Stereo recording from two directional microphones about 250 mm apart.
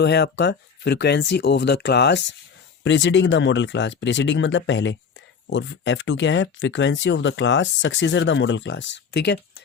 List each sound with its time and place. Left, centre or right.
0.0 s speech: left